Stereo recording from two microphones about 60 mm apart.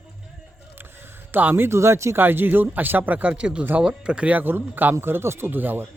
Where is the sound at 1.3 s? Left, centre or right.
Right.